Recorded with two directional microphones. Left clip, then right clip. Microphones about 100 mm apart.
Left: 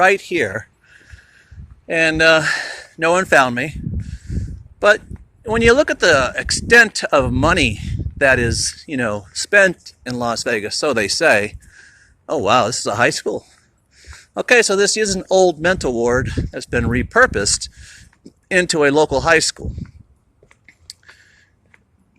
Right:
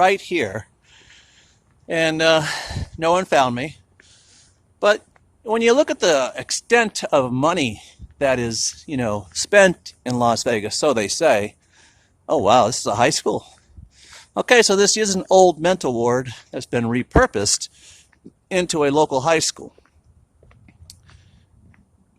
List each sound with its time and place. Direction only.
0.0 s speech: centre (ahead or behind)
7.4 s speech: 10° left (ahead or behind); by 9.2 s 5° right (ahead or behind)
9.2 s speech: 30° right (ahead or behind)
10.9 s speech: centre (ahead or behind)
11.8 s a sound: 20° right (ahead or behind)
13.1 s speech: 35° right (ahead or behind)
13.9 s a sound: 35° right (ahead or behind)
14.6 s speech: 45° right (ahead or behind)
15.6 s speech: 15° right (ahead or behind)
18.4 s speech: centre (ahead or behind)
19.4 s speech: 15° right (ahead or behind)
20.8 s a sound: centre (ahead or behind)